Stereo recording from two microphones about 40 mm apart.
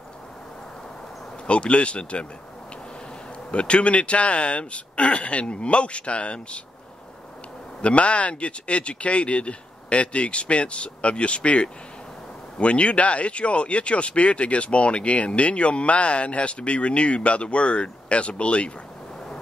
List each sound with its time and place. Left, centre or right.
1.5 s speech: left
3.5 s speech: left
7.8 s speech: left